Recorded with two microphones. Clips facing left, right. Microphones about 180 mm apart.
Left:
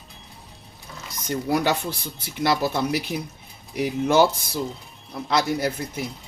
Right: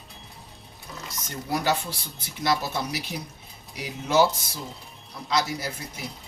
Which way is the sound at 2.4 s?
55° left (ahead or behind).